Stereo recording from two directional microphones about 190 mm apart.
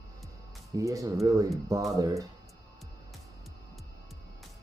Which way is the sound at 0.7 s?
15° right (ahead or behind).